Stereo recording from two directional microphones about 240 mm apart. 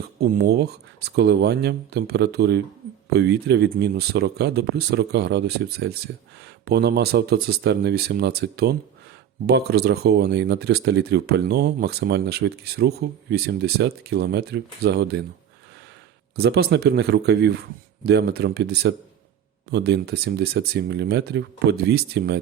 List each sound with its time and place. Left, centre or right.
0.2 s speech: right
16.4 s speech: right